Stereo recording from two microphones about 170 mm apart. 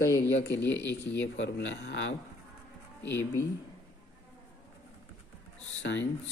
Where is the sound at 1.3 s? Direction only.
90° left.